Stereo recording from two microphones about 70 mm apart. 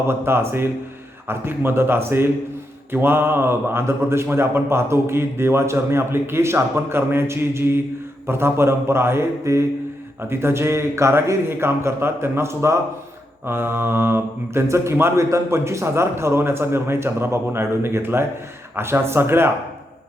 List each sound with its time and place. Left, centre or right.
0.1 s a man's voice: right